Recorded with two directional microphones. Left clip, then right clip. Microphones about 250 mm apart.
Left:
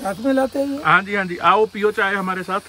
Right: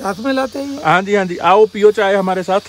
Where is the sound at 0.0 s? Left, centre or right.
Right.